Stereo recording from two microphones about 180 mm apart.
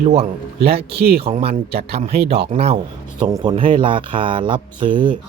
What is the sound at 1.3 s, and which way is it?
Speech, 35° right (ahead or behind).